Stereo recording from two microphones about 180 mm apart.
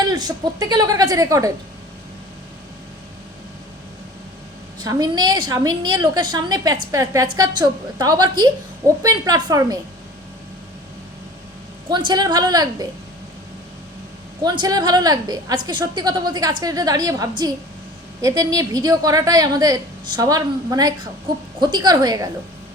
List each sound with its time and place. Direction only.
0.1 s a woman's voice: 20° right (ahead or behind)
4.8 s a woman's voice: 20° right (ahead or behind)
11.9 s a woman's voice: 25° right (ahead or behind)
14.4 s a woman's voice: 25° right (ahead or behind)